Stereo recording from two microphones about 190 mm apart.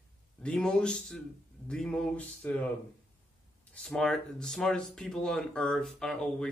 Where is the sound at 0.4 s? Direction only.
5° left (ahead or behind).